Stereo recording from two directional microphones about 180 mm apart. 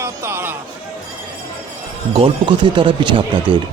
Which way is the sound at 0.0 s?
15° right (ahead or behind).